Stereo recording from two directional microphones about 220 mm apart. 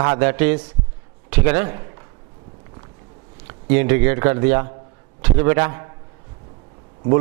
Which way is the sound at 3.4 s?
10° right (ahead or behind).